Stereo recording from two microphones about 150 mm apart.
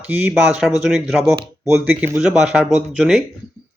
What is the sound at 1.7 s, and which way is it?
Speech, 15° right (ahead or behind).